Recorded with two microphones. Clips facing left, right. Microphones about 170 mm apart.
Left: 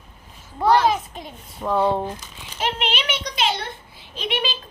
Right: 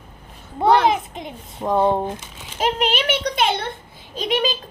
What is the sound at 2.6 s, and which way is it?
A child's voice, 40° right (ahead or behind).